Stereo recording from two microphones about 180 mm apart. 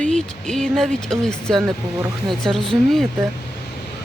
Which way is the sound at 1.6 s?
20° right (ahead or behind).